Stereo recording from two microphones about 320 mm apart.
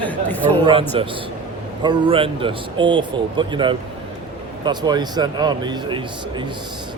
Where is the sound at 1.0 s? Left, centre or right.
Centre.